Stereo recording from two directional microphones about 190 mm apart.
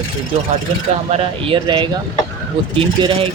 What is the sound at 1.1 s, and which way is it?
Speech, 30° right (ahead or behind).